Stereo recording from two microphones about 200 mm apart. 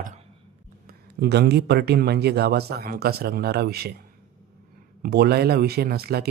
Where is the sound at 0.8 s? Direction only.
50° right (ahead or behind).